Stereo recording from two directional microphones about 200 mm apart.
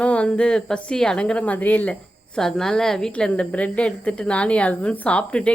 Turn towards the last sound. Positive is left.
turn(degrees=5)  # may be behind; listen again after turning